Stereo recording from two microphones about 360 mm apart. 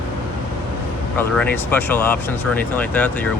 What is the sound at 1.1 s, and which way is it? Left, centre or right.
Speech, centre.